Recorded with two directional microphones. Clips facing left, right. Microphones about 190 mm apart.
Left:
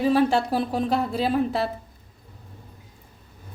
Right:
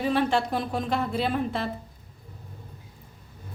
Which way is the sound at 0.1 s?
40° left (ahead or behind).